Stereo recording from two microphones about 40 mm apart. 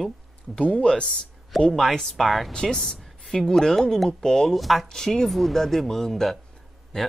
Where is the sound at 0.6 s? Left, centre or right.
Left.